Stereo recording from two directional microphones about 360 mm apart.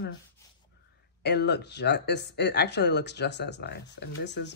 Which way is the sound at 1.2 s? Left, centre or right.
Left.